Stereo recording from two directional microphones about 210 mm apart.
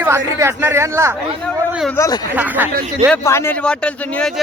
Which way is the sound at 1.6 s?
5° right (ahead or behind).